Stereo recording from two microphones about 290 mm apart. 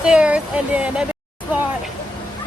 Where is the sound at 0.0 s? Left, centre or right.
Centre.